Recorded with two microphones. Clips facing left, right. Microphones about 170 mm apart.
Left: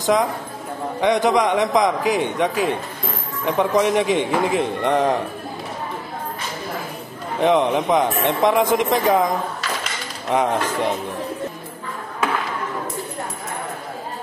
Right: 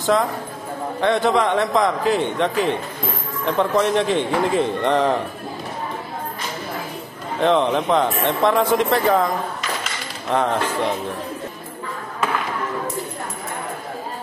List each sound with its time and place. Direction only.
0.0 s a man's voice: 15° left (ahead or behind)
7.3 s a man's voice: 15° left (ahead or behind)
10.3 s a man's voice: 15° left (ahead or behind)